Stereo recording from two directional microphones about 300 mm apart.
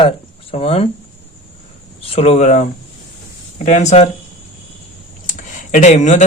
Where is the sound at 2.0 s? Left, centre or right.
Centre.